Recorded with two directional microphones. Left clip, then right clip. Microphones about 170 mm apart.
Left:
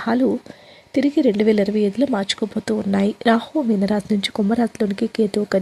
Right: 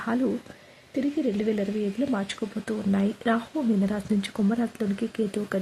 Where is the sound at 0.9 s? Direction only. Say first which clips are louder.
Left 10 dB; 40° left (ahead or behind).